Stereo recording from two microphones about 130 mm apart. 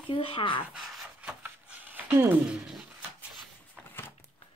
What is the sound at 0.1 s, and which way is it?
Speech, 40° left (ahead or behind).